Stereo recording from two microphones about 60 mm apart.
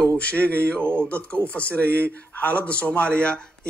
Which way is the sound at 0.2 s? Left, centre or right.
Left.